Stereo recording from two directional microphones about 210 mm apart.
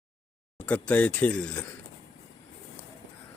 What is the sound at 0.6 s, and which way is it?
Speech, 5° left (ahead or behind).